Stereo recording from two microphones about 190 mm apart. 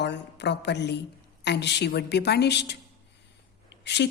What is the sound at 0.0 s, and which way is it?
A woman's voice, 65° left (ahead or behind).